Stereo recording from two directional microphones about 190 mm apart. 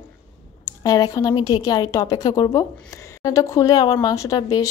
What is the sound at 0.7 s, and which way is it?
A woman's voice, 20° left (ahead or behind).